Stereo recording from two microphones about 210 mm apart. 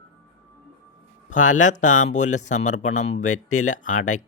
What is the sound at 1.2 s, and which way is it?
A woman's voice, 35° left (ahead or behind).